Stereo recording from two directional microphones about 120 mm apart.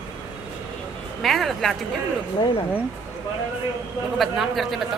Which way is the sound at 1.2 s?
Centre (ahead or behind).